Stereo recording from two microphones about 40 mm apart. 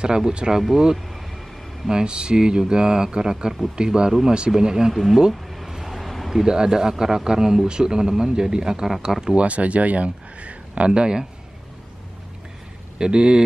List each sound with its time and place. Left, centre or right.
0.0 s speech: right
0.5 s speech: centre
1.9 s speech: right
4.9 s speech: centre
5.3 s a sound: centre
5.7 s vehicle: centre
6.3 s speech: centre
9.2 s speech: right
10.9 s speech: right
13.0 s speech: right